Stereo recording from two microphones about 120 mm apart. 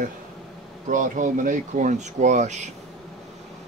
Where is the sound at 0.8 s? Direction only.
90° right.